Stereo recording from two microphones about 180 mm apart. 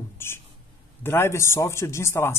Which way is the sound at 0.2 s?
15° left (ahead or behind).